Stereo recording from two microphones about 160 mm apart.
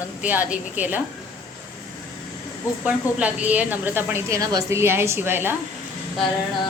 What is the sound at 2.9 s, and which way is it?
A woman's voice, 10° right (ahead or behind).